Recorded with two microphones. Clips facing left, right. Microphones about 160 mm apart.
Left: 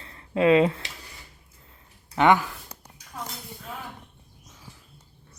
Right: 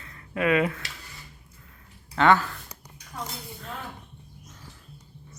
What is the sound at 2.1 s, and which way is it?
Speech, 15° left (ahead or behind).